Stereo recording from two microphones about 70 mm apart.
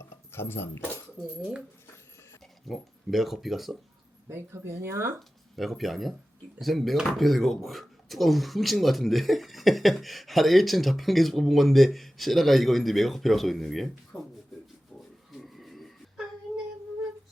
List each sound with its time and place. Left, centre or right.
0.0 s keys jangling: left
2.6 s speech: centre
4.3 s speech: right
5.5 s speech: centre
14.1 s speech: left
15.3 s a sound: centre